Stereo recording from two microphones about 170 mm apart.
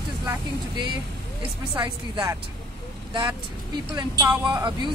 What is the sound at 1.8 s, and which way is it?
Speech, 25° right (ahead or behind).